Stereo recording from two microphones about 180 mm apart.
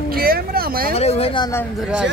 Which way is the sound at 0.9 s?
35° left (ahead or behind).